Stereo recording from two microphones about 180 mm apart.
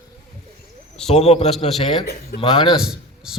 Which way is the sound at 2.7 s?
5° right (ahead or behind).